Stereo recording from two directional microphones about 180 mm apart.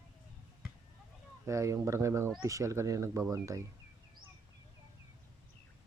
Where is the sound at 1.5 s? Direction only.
15° right (ahead or behind).